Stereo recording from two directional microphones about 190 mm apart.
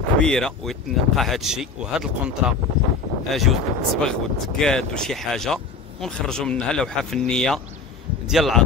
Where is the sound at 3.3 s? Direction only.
Centre (ahead or behind).